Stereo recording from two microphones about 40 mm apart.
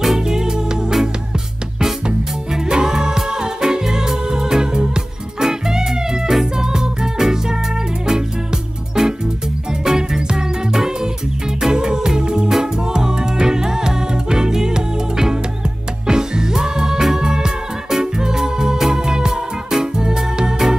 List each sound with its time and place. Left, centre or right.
0.2 s music: centre
2.5 s music: centre
9.0 s music: centre